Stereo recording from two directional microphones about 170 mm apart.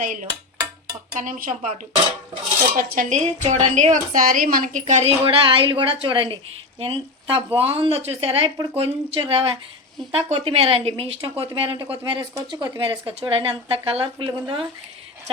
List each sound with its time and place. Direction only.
0.0 s speech: 55° right (ahead or behind)
2.7 s speech: 55° right (ahead or behind); by 14.4 s 30° right (ahead or behind)